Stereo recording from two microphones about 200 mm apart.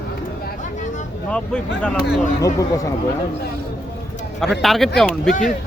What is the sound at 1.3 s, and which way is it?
Speech, 5° left (ahead or behind).